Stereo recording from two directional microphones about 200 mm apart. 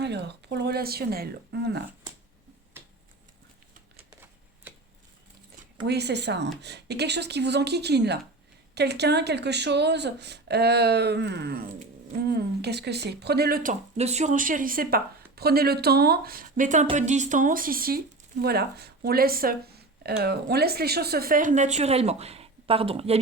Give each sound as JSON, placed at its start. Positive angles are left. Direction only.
{"t": 0.0, "sound": "speech", "side_deg": -55}
{"t": 4.1, "sound": "typewriter", "side_deg": -10}
{"t": 5.8, "sound": "speech", "side_deg": -55}